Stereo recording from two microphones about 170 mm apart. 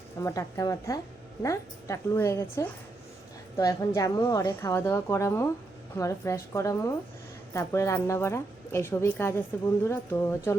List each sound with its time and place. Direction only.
0.2 s a woman's voice: 20° left (ahead or behind)